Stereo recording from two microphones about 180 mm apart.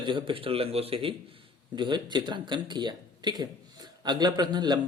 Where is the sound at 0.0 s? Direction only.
30° right (ahead or behind).